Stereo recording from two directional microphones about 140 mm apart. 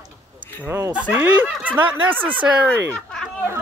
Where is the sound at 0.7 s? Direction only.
10° right (ahead or behind).